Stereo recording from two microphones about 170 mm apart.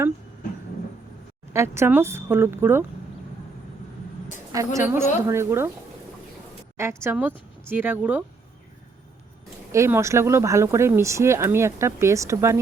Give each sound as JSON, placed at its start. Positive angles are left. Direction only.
{"t": 1.5, "sound": "speech", "side_deg": -15}
{"t": 4.5, "sound": "speech", "side_deg": -15}
{"t": 6.7, "sound": "speech", "side_deg": -15}
{"t": 9.7, "sound": "speech", "side_deg": -15}